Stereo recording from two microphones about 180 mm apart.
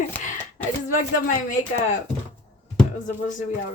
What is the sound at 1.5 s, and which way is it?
Speech, 40° left (ahead or behind).